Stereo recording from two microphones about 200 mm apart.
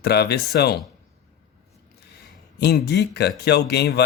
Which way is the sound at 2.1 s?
55° left (ahead or behind).